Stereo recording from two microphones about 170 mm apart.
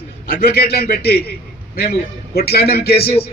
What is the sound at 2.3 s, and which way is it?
Speech, 65° left (ahead or behind).